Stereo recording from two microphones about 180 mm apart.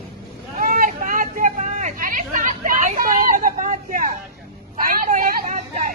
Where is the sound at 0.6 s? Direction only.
50° right (ahead or behind).